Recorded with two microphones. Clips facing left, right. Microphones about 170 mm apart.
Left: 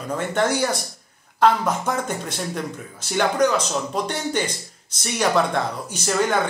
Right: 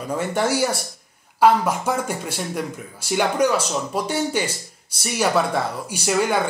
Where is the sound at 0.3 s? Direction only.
10° right (ahead or behind).